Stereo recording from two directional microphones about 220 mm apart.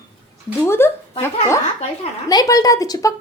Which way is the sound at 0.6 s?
10° left (ahead or behind).